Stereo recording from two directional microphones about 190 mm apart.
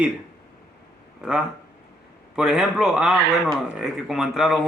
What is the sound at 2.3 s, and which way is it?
A man's voice, 5° right (ahead or behind).